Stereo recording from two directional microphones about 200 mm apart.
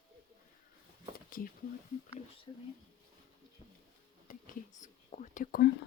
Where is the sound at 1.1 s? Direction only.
45° left (ahead or behind).